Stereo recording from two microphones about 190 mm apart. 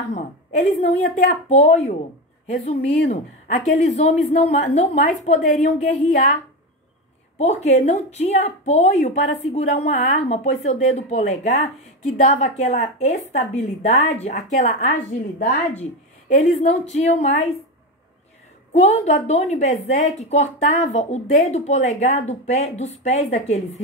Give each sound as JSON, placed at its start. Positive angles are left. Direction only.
{"t": 1.0, "sound": "a woman's voice", "side_deg": 35}
{"t": 18.7, "sound": "a woman's voice", "side_deg": 35}